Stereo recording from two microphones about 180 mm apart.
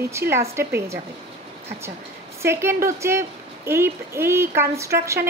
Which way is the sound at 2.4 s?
15° right (ahead or behind).